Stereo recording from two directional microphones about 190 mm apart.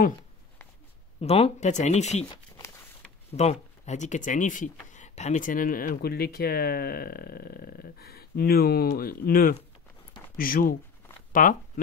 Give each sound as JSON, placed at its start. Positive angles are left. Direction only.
{"t": 1.2, "sound": "speech", "side_deg": 30}
{"t": 3.3, "sound": "speech", "side_deg": 35}